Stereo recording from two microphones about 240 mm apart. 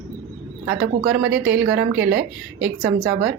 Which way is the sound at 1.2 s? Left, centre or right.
Right.